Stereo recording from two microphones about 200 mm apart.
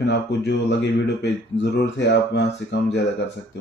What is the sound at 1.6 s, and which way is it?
Speech, 60° left (ahead or behind).